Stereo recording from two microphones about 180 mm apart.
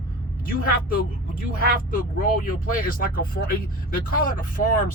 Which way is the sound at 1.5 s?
50° left (ahead or behind).